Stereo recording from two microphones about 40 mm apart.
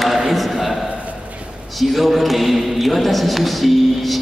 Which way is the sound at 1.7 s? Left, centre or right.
Centre.